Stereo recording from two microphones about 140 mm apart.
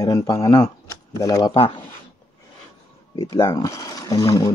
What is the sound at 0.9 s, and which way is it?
Speech, 25° left (ahead or behind).